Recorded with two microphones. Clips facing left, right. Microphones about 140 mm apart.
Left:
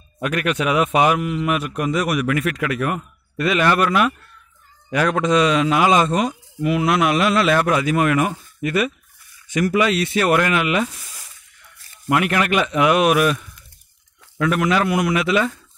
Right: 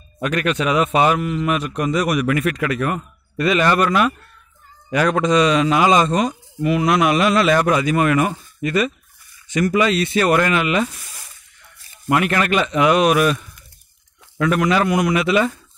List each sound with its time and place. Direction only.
0.2 s a man's voice: 10° left (ahead or behind)
12.1 s a man's voice: 5° left (ahead or behind)
14.4 s a man's voice: centre (ahead or behind)